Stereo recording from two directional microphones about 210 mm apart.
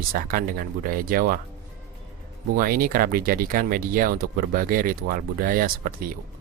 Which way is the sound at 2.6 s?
45° right (ahead or behind).